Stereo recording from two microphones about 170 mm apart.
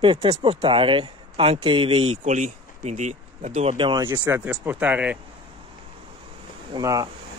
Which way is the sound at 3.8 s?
25° right (ahead or behind).